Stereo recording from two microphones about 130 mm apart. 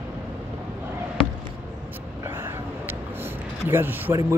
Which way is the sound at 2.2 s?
20° right (ahead or behind).